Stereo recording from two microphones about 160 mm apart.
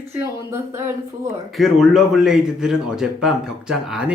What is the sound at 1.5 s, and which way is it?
A man's voice, centre (ahead or behind).